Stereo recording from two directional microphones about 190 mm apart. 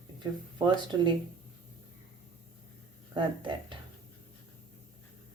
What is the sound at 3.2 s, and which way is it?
Speech, 25° right (ahead or behind).